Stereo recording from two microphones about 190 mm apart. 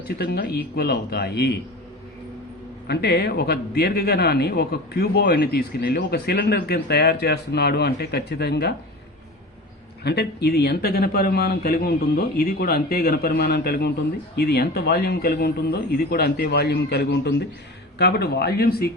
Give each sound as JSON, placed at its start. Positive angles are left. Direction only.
{"t": 0.2, "sound": "a man's voice", "side_deg": 55}
{"t": 2.8, "sound": "a man's voice", "side_deg": 60}
{"t": 10.0, "sound": "a man's voice", "side_deg": 60}